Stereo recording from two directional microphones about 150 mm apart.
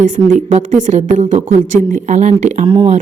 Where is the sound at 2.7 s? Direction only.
35° right (ahead or behind).